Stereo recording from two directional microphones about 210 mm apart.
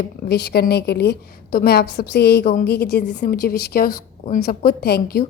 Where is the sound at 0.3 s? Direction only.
50° left (ahead or behind).